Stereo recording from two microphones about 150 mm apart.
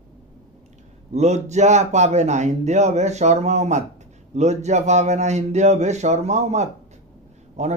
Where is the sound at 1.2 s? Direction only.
50° right (ahead or behind).